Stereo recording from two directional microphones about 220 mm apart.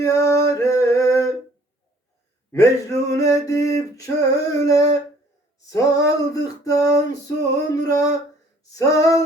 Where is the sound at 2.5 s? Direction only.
15° left (ahead or behind).